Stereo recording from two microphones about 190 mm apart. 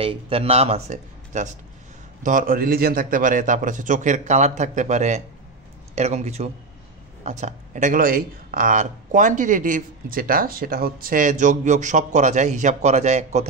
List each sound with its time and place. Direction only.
0.0 s a man's voice: 30° right (ahead or behind)